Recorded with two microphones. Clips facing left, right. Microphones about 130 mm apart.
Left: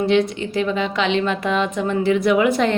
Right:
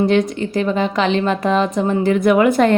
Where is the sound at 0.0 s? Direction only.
45° right (ahead or behind).